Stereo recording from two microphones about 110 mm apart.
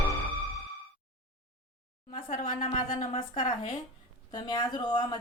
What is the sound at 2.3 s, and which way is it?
Speech, 75° left (ahead or behind).